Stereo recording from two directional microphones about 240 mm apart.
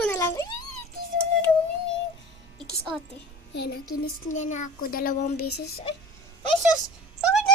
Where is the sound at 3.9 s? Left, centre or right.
Left.